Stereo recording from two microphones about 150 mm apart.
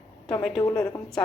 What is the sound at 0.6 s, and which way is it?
Speech, 20° left (ahead or behind).